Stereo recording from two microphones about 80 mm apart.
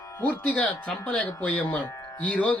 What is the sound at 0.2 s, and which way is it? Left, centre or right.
Speech, centre.